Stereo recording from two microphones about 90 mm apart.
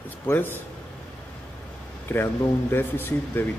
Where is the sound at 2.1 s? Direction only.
20° left (ahead or behind).